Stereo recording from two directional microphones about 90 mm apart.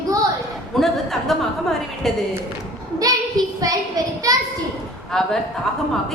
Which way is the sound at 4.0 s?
45° right (ahead or behind).